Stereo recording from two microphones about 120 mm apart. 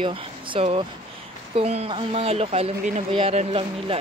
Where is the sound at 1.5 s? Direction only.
55° right (ahead or behind).